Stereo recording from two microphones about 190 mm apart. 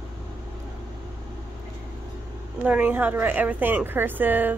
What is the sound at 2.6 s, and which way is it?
A woman's voice, 5° right (ahead or behind).